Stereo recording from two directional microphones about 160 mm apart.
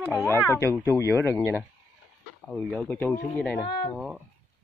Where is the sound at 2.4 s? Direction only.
Centre (ahead or behind).